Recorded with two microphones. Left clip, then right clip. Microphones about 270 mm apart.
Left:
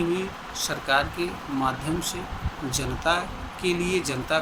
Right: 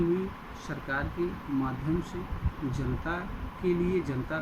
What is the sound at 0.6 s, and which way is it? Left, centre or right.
Speech, left.